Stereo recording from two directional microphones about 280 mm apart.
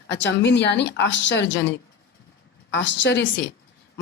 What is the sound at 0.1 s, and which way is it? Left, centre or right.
Speech, left.